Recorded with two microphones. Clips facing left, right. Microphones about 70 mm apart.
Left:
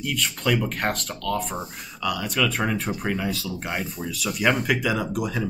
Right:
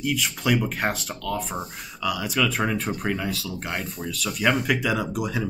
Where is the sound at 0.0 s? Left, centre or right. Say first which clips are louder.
Right 1 dB; centre.